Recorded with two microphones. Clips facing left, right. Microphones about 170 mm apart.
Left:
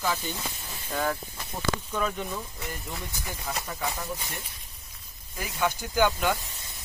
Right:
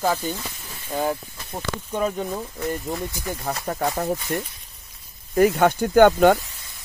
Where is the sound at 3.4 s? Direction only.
55° right (ahead or behind).